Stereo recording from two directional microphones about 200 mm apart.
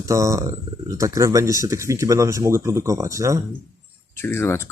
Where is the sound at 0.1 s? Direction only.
15° right (ahead or behind).